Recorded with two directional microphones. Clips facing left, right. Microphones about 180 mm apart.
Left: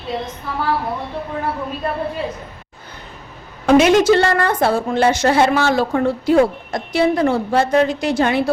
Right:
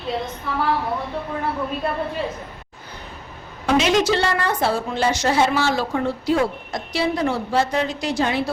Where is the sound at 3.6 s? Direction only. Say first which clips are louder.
Left 7 dB; 55° left (ahead or behind).